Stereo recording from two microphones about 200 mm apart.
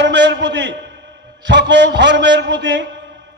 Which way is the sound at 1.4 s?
60° right (ahead or behind).